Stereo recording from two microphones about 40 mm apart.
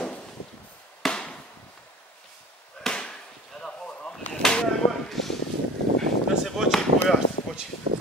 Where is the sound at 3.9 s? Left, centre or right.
Left.